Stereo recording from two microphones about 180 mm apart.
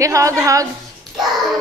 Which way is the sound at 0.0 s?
15° right (ahead or behind).